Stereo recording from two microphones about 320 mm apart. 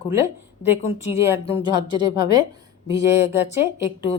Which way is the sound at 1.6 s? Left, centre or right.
Centre.